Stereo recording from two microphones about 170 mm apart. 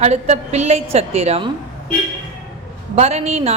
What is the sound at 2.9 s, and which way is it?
Speech, 40° right (ahead or behind).